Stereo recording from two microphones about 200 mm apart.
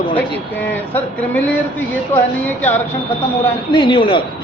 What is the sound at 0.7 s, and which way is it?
Speech, 10° left (ahead or behind).